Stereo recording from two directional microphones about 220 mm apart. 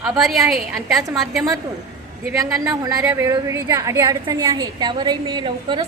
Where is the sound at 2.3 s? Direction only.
15° right (ahead or behind).